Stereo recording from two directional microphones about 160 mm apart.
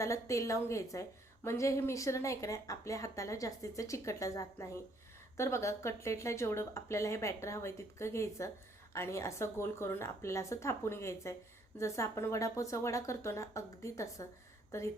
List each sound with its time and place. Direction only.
0.0 s a woman's voice: 20° left (ahead or behind)